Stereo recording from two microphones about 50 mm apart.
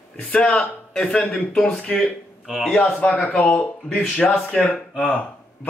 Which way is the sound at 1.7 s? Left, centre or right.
Left.